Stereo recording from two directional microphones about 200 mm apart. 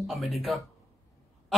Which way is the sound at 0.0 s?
Centre (ahead or behind).